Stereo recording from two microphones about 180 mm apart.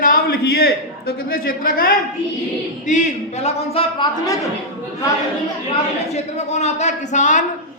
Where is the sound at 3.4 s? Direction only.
30° left (ahead or behind).